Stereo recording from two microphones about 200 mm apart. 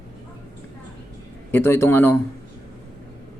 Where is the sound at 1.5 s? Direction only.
10° left (ahead or behind).